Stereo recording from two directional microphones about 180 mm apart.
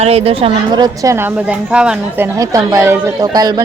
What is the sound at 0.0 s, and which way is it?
A woman's voice, 35° right (ahead or behind).